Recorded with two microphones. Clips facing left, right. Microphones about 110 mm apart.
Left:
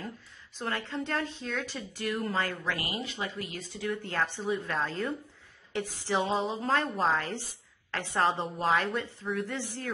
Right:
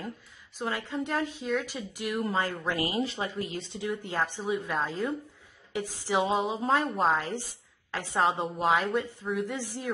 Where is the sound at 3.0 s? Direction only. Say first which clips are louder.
Right 5 dB; 30° right (ahead or behind); by 8.8 s centre (ahead or behind).